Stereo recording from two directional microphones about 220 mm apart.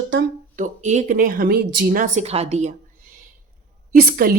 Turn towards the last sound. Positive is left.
turn(degrees=-40)  # may be behind; listen again after turning